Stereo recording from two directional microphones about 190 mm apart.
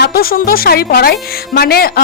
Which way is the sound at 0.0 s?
55° left (ahead or behind).